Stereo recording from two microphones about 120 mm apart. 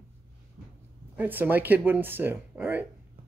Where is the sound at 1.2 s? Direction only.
15° right (ahead or behind).